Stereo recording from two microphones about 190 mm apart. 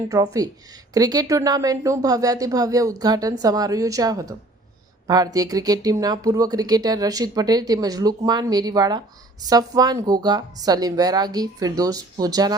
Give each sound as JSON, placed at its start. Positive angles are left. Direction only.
{"t": 0.1, "sound": "speech", "side_deg": -20}